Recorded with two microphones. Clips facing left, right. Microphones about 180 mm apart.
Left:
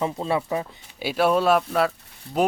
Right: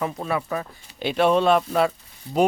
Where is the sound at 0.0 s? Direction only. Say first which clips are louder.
Left 2 dB; 20° left (ahead or behind).